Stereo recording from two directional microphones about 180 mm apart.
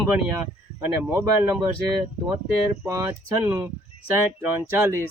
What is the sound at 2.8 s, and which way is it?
Speech, 15° right (ahead or behind).